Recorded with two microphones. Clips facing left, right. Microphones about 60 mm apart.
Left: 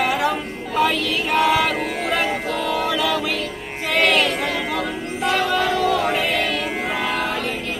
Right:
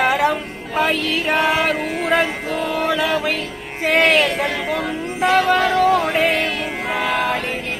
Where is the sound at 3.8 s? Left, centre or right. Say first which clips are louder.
Right 4 dB; right.